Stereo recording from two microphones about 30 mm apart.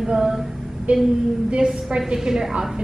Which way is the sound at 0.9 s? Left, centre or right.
Right.